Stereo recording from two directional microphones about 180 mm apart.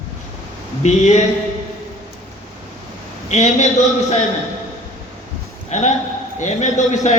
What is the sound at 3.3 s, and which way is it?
Speech, 40° left (ahead or behind).